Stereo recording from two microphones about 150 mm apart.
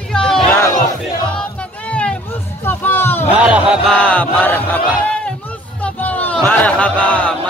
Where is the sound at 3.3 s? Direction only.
5° right (ahead or behind).